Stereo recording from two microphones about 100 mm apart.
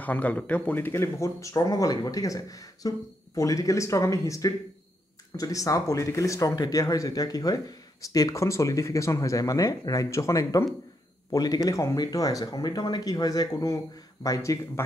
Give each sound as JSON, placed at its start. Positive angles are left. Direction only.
{"t": 0.0, "sound": "speech", "side_deg": 15}